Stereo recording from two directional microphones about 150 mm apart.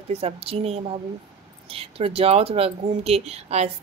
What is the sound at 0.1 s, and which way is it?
Speech, 40° right (ahead or behind).